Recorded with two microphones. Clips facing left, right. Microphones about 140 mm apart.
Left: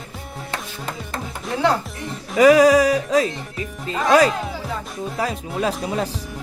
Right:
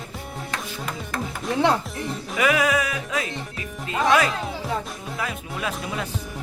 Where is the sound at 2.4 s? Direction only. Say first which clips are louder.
Left 10 dB; 35° left (ahead or behind).